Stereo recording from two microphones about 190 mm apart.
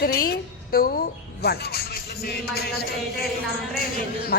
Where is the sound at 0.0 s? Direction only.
50° left (ahead or behind).